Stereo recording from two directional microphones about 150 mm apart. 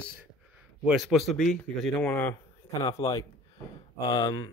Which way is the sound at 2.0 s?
15° left (ahead or behind).